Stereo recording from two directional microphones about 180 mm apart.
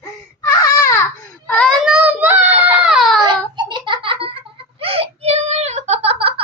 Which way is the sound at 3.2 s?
25° right (ahead or behind).